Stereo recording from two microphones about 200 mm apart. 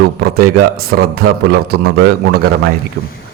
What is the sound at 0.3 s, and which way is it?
A man's voice, 50° right (ahead or behind).